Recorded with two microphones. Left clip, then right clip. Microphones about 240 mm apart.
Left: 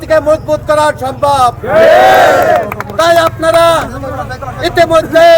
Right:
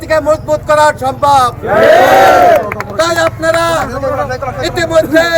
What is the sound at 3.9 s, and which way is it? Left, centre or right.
Speech, right.